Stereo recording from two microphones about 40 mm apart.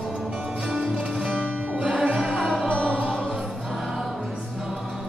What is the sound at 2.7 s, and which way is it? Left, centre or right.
Music, left.